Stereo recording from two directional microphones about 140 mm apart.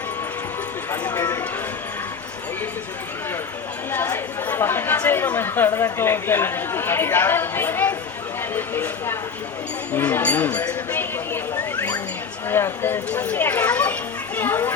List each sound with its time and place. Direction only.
0.9 s speech: 15° left (ahead or behind)
3.9 s speech: 15° left (ahead or behind)
12.5 s a child's voice: 15° left (ahead or behind)